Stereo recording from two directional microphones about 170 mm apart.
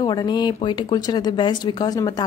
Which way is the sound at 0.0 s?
25° left (ahead or behind).